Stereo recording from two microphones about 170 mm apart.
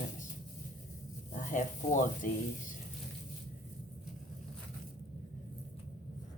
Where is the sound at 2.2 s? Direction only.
55° left (ahead or behind).